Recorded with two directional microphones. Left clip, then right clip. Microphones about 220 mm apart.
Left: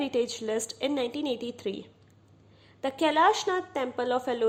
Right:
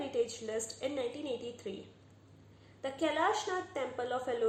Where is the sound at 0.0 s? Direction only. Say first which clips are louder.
Left 6 dB; 45° left (ahead or behind).